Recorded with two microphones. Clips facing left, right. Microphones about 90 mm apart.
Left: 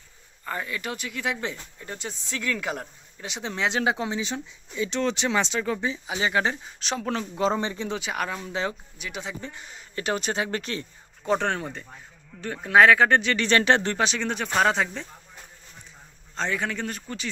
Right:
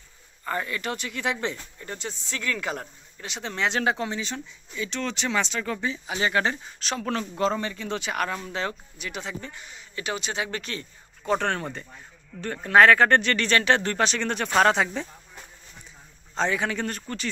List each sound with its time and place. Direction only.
0.5 s speech: 5° left (ahead or behind); by 7.9 s 25° left (ahead or behind)
7.9 s speech: 10° left (ahead or behind)
9.4 s speech: 30° left (ahead or behind)
10.4 s speech: 30° left (ahead or behind); by 13.5 s 10° left (ahead or behind)
13.5 s speech: 30° left (ahead or behind)
13.9 s a man's voice: 10° left (ahead or behind)
16.3 s a man's voice: 5° right (ahead or behind)